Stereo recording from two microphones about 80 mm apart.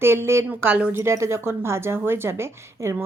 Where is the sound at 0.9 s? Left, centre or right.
Right.